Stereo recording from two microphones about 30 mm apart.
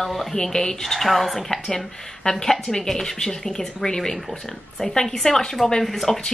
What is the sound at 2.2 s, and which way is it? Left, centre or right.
A woman's voice, centre.